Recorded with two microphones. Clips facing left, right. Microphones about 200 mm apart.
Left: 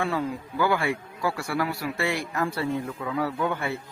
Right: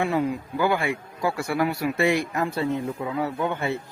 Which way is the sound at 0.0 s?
15° right (ahead or behind).